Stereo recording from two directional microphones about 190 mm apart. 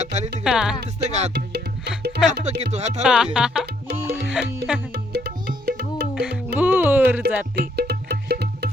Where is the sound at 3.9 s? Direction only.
15° right (ahead or behind).